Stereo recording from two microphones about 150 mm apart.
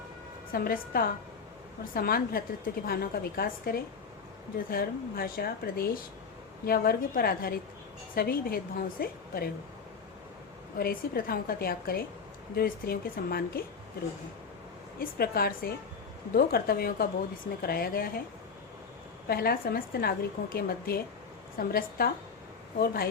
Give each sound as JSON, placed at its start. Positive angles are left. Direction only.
{"t": 0.5, "sound": "a woman's voice", "side_deg": 80}
{"t": 10.8, "sound": "a woman's voice", "side_deg": 90}
{"t": 14.9, "sound": "a woman's voice", "side_deg": 90}
{"t": 19.3, "sound": "a woman's voice", "side_deg": 90}